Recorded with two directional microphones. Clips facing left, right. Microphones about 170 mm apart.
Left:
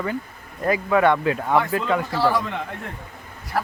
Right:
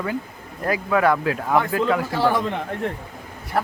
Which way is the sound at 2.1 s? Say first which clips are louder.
Right 1 dB; 15° right (ahead or behind).